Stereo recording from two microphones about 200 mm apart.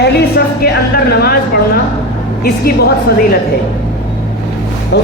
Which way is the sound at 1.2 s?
50° left (ahead or behind).